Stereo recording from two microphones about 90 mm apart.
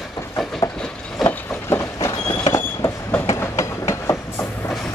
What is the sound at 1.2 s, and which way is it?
Train, 30° left (ahead or behind).